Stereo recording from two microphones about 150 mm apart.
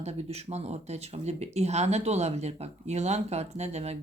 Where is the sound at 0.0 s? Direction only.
45° right (ahead or behind).